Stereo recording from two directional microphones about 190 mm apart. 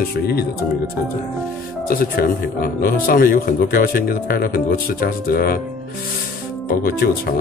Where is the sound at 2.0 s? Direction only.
50° left (ahead or behind).